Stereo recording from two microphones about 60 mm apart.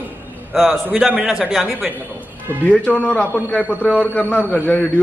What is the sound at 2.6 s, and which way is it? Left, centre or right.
A man's voice, left.